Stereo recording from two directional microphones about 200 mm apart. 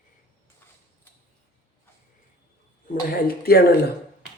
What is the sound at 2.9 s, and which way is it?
Speech, 50° left (ahead or behind).